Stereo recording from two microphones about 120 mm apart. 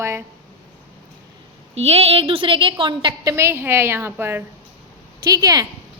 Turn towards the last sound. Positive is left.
turn(degrees=-30)  # may be behind; listen again after turning